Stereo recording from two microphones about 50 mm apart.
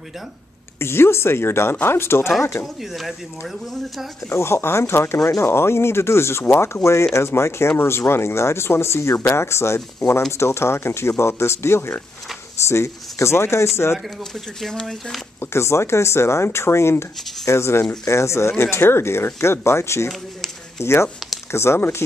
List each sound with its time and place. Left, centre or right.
0.7 s speech: left
2.6 s speech: centre
4.3 s speech: left
14.6 s speech: centre
15.4 s speech: left
18.6 s speech: left